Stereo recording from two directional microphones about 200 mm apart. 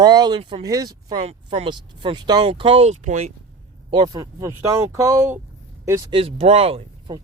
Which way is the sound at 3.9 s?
20° right (ahead or behind).